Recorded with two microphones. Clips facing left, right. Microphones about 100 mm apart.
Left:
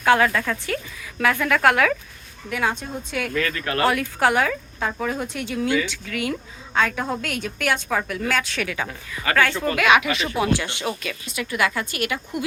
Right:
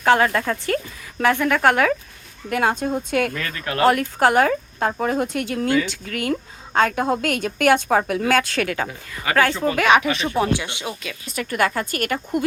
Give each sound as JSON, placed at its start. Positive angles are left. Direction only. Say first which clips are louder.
{"t": 0.0, "sound": "speech", "louder": "right 1 dB", "side_deg": -30}
{"t": 2.5, "sound": "a woman's voice", "louder": "right 5 dB", "side_deg": -50}
{"t": 3.6, "sound": "speech", "louder": "right 2 dB", "side_deg": -15}
{"t": 3.8, "sound": "speech", "louder": "right 4 dB", "side_deg": -35}
{"t": 5.2, "sound": "a woman's voice", "louder": "right 3 dB", "side_deg": -50}
{"t": 10.5, "sound": "speech", "louder": "left 1 dB", "side_deg": -15}
{"t": 11.3, "sound": "a woman's voice", "louder": "right 2 dB", "side_deg": -45}